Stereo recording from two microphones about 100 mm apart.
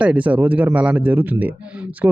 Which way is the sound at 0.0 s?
15° right (ahead or behind).